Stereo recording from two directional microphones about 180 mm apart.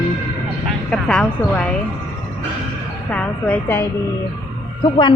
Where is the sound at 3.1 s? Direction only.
10° left (ahead or behind).